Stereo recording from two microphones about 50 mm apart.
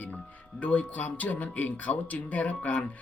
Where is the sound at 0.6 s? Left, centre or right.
Left.